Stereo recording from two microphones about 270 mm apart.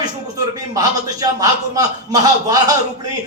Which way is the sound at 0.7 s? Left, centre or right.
Centre.